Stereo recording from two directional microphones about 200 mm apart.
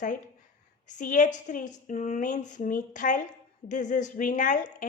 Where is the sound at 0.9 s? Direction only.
40° left (ahead or behind).